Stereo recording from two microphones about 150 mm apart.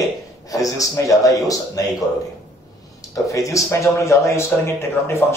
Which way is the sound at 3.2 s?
20° left (ahead or behind).